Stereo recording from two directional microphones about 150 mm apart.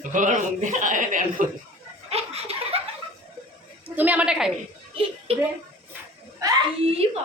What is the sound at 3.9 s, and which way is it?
Speech, 10° right (ahead or behind).